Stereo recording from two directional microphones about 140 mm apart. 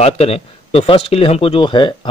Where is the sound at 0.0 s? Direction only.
45° left (ahead or behind).